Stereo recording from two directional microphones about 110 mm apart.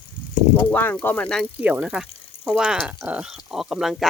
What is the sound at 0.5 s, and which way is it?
Speech, 15° left (ahead or behind).